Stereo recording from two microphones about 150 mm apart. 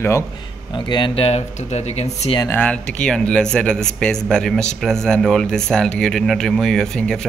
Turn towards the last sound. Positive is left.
turn(degrees=5)  # may be behind; listen again after turning